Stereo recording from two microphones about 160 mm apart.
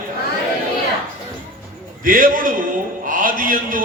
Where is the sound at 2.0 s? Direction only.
60° right (ahead or behind).